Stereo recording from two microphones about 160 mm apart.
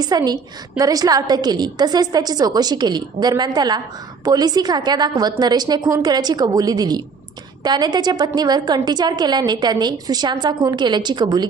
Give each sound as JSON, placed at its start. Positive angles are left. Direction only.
{"t": 0.0, "sound": "a woman's voice", "side_deg": -25}